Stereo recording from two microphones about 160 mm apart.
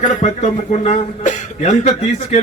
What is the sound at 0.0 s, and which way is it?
Speech, 50° left (ahead or behind).